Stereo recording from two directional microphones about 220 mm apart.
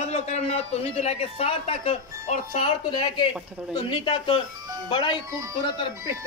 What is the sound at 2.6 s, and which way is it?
A man's voice, 20° left (ahead or behind).